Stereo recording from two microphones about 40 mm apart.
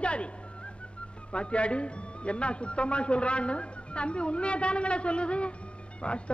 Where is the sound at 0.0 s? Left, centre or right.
Left.